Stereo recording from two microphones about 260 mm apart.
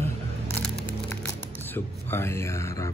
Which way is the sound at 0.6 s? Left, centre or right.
Centre.